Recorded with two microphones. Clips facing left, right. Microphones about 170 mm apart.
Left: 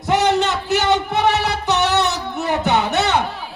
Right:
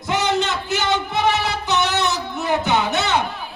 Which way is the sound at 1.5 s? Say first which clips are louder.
Left 3 dB; 65° left (ahead or behind).